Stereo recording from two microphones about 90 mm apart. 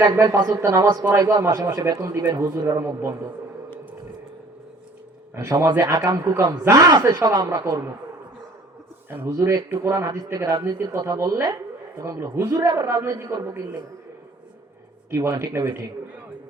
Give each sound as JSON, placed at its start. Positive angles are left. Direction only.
{"t": 0.0, "sound": "a man's voice", "side_deg": -40}
{"t": 5.3, "sound": "a man's voice", "side_deg": -35}
{"t": 5.8, "sound": "a man's voice", "side_deg": -45}
{"t": 9.0, "sound": "a man's voice", "side_deg": -25}
{"t": 10.3, "sound": "speech", "side_deg": -45}
{"t": 10.6, "sound": "a man's voice", "side_deg": -35}
{"t": 12.6, "sound": "a man's voice", "side_deg": -45}
{"t": 15.1, "sound": "a man's voice", "side_deg": -35}